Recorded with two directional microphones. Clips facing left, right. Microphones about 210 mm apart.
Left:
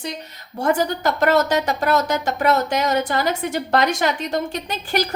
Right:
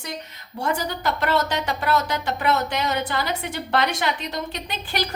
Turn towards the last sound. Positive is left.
turn(degrees=45)  # may be behind; listen again after turning